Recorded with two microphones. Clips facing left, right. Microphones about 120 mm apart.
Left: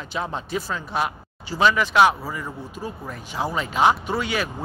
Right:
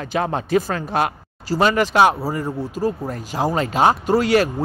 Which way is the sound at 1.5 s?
40° right (ahead or behind).